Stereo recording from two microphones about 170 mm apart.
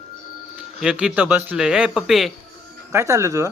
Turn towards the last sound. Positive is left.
turn(degrees=-15)  # may be behind; listen again after turning